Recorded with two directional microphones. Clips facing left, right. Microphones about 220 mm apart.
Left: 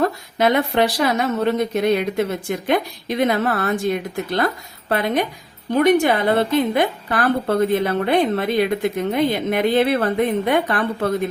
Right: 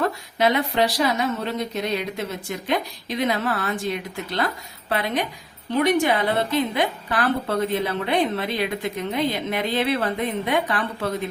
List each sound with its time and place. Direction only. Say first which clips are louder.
0.0 s a woman's voice: left 3 dB; 50° left (ahead or behind)